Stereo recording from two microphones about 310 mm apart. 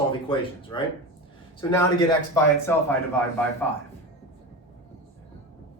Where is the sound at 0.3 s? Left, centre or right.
Centre.